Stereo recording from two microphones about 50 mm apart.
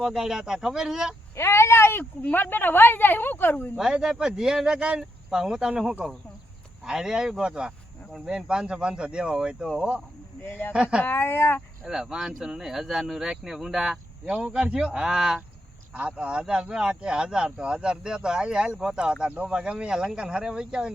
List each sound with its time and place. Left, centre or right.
0.0 s speech: centre
1.4 s speech: left
2.3 s speech: left
3.8 s speech: centre
10.4 s speech: left
11.9 s speech: centre
14.3 s speech: right
19.3 s speech: right
19.5 s speech: centre